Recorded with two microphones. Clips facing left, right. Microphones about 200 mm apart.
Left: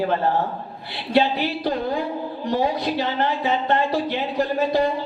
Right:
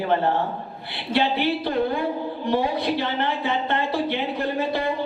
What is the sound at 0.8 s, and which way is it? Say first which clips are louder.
Speech: left 3 dB; 60° right (ahead or behind).